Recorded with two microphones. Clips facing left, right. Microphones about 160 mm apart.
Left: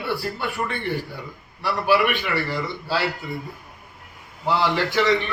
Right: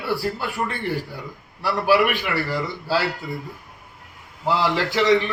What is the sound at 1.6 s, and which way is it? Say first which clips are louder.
Speech: right 1 dB; centre (ahead or behind).